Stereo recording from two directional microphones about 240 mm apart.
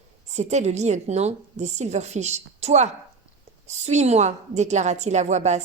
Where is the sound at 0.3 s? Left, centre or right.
Right.